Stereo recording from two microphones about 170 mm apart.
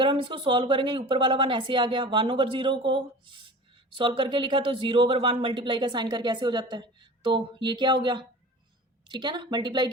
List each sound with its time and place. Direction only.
0.0 s speech: 30° right (ahead or behind)